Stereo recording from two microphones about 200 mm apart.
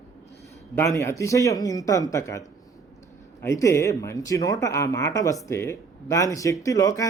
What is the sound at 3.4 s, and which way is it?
Speech, 15° left (ahead or behind).